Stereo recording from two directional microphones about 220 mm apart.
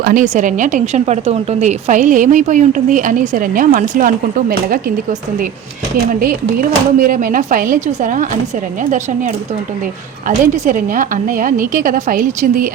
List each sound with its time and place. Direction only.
0.0 s a woman's voice: 35° right (ahead or behind)
6.6 s a woman's voice: 40° right (ahead or behind)